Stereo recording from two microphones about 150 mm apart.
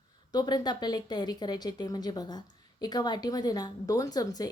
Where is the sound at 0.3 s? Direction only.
30° left (ahead or behind).